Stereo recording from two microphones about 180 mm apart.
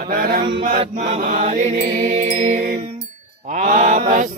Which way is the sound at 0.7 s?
40° right (ahead or behind).